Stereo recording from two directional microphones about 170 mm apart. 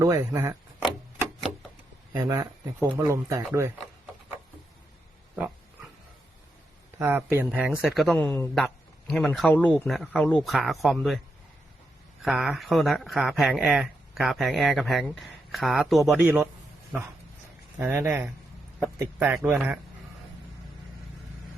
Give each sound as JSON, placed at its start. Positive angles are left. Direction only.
{"t": 0.0, "sound": "speech", "side_deg": -15}
{"t": 2.1, "sound": "speech", "side_deg": -20}
{"t": 7.0, "sound": "speech", "side_deg": -15}
{"t": 12.2, "sound": "speech", "side_deg": 0}
{"t": 17.7, "sound": "speech", "side_deg": -15}